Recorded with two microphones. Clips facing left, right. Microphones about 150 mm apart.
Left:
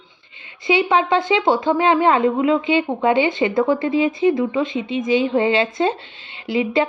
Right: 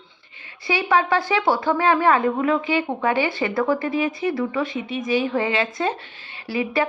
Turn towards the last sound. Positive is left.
turn(degrees=20)  # may be behind; listen again after turning